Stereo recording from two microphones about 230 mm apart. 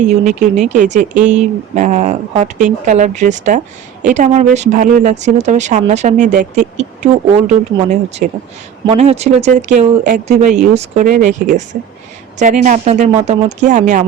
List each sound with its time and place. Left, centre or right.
0.0 s speech: right